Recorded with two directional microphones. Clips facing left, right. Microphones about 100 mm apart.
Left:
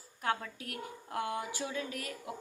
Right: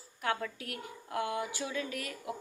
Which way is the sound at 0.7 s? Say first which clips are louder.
Right 1 dB; 35° left (ahead or behind).